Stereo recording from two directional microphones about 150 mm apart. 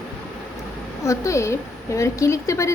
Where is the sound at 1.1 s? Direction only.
20° left (ahead or behind).